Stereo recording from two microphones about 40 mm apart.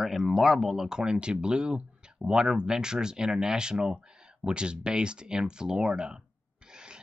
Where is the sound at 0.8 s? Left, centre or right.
Centre.